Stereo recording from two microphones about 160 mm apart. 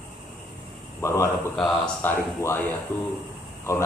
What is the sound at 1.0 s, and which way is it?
Speech, 20° left (ahead or behind).